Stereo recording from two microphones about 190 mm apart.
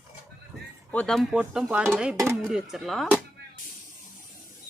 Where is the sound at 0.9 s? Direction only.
Centre (ahead or behind).